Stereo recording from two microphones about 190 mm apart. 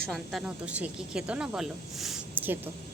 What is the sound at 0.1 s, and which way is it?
Speech, centre (ahead or behind).